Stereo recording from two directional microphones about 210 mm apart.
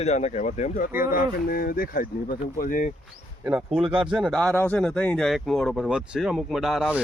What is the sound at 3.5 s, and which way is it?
Speech, 5° right (ahead or behind).